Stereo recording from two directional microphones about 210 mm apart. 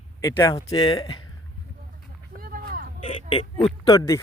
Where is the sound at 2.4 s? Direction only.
45° right (ahead or behind).